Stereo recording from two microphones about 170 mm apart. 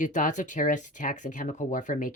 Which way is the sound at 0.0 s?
50° left (ahead or behind).